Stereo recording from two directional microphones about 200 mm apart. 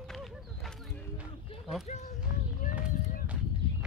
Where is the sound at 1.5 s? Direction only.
25° left (ahead or behind).